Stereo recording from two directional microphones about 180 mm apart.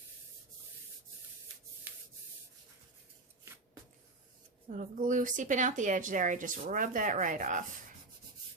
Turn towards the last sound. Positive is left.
turn(degrees=-45)  # may be behind; listen again after turning